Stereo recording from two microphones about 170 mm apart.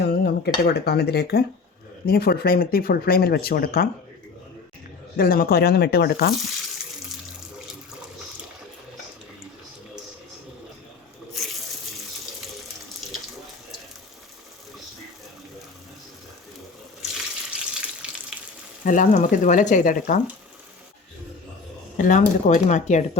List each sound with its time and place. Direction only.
0.0 s speech: 70° left (ahead or behind)
5.1 s speech: 60° left (ahead or behind)
17.2 s water tap: 5° right (ahead or behind)
18.9 s speech: 50° left (ahead or behind)
21.9 s speech: 50° left (ahead or behind)